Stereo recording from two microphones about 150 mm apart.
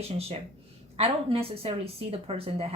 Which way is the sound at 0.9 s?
40° right (ahead or behind).